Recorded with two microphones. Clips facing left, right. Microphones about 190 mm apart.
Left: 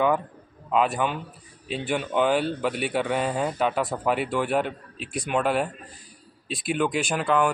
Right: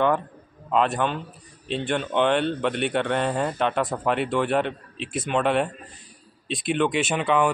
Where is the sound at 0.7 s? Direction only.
Centre (ahead or behind).